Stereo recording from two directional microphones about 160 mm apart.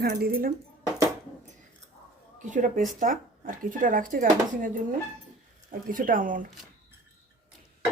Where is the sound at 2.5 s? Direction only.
55° right (ahead or behind).